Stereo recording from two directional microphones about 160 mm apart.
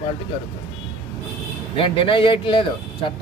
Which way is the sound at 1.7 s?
35° left (ahead or behind).